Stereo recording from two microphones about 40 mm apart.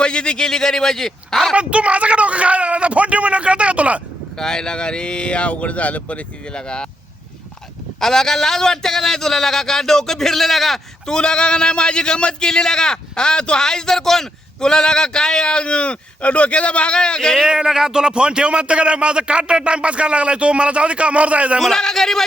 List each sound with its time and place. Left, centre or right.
0.0 s a man's voice: left
1.5 s speech: right
4.4 s speech: centre
7.9 s a man's voice: centre
11.0 s speech: centre
17.4 s a man's voice: centre; by 21.6 s right
21.6 s a man's voice: centre